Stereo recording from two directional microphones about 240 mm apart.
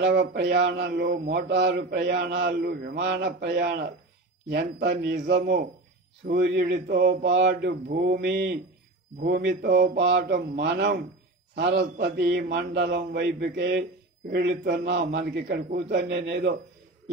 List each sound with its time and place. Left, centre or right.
0.0 s a man's voice: right